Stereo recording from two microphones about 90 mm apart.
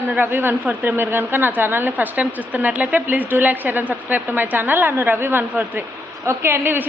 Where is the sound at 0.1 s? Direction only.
25° right (ahead or behind).